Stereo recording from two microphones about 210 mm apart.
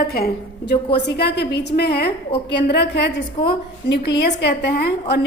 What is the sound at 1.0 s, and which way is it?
A woman's voice, 50° left (ahead or behind).